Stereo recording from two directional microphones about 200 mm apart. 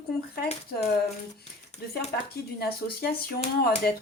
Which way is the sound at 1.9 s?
55° left (ahead or behind).